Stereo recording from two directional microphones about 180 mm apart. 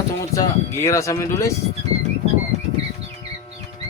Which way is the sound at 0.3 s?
15° left (ahead or behind).